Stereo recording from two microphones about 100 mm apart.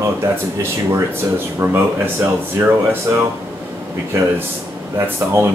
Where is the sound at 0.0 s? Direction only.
30° right (ahead or behind).